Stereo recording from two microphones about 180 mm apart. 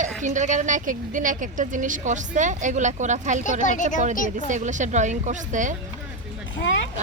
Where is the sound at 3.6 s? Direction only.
45° left (ahead or behind).